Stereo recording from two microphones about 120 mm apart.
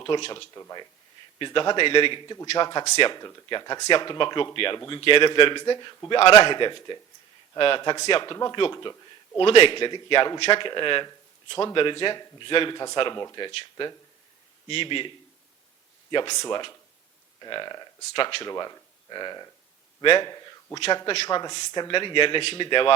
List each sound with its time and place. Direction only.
0.0 s a man's voice: 35° left (ahead or behind)
9.4 s a man's voice: 45° left (ahead or behind)
16.1 s speech: 35° left (ahead or behind)